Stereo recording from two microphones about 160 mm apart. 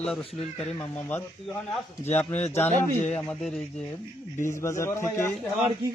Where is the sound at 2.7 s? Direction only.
45° left (ahead or behind).